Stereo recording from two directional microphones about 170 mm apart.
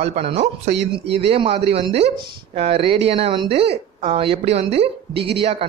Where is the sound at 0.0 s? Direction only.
35° right (ahead or behind).